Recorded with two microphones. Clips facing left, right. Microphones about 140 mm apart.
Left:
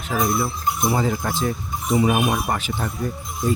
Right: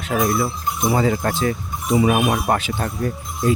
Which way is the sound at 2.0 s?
90° right.